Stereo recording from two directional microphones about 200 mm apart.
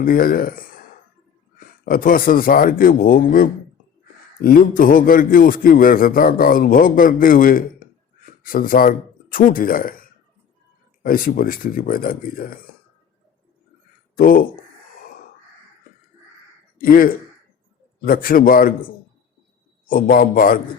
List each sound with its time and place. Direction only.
0.0 s a man's voice: 45° left (ahead or behind)
11.0 s a man's voice: 45° left (ahead or behind)
14.2 s a man's voice: 45° left (ahead or behind)
16.7 s a man's voice: 45° left (ahead or behind)
19.9 s a man's voice: 45° left (ahead or behind)